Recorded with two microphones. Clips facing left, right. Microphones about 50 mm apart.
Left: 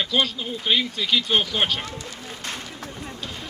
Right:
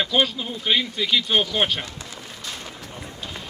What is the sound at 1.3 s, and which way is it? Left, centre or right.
Speech, right.